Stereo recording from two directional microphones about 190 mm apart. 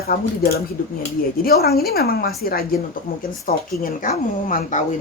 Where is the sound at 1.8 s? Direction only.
55° left (ahead or behind).